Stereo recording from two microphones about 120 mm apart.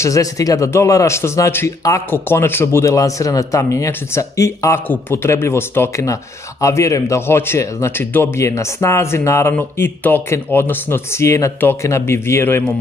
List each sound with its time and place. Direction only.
0.0 s a man's voice: 30° left (ahead or behind)